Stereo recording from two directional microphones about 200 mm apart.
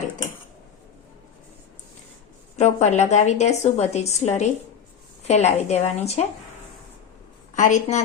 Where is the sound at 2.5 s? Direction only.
35° left (ahead or behind).